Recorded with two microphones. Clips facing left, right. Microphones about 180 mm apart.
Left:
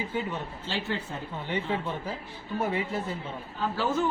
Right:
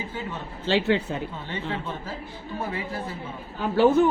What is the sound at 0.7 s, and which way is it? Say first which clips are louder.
Speech: right 10 dB; 75° right (ahead or behind).